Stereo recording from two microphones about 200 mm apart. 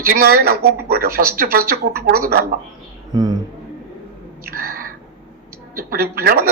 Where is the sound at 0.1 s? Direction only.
50° right (ahead or behind).